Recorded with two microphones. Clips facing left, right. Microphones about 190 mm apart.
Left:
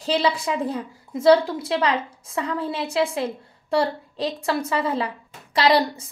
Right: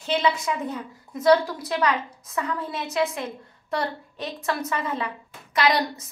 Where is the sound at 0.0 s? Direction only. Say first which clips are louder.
Left 2 dB; 35° left (ahead or behind).